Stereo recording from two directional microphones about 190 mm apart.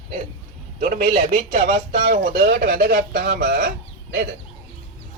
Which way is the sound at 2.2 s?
55° right (ahead or behind).